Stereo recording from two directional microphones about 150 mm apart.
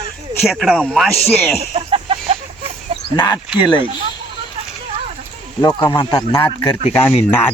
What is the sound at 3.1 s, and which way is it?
Speech, 30° left (ahead or behind).